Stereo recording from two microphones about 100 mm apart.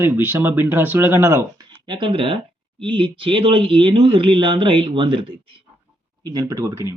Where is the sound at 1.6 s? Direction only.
50° right (ahead or behind).